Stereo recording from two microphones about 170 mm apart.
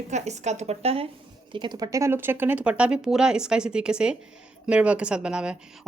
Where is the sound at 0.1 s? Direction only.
40° right (ahead or behind).